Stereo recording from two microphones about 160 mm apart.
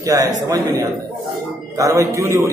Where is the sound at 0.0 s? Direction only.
20° right (ahead or behind).